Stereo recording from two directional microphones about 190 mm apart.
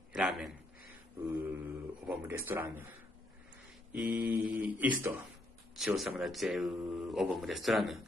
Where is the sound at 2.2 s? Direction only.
15° right (ahead or behind).